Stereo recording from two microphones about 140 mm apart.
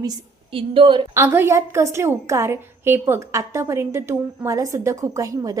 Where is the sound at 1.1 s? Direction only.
20° right (ahead or behind).